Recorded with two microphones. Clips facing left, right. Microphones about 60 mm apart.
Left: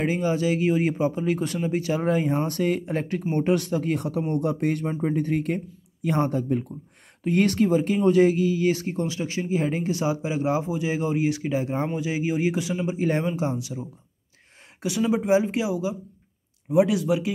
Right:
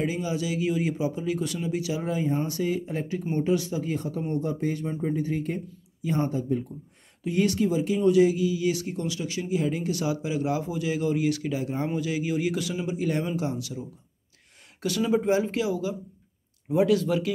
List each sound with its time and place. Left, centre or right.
0.0 s speech: left; by 17.3 s centre